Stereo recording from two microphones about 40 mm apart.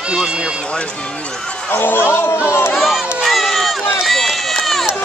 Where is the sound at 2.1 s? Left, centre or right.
Left.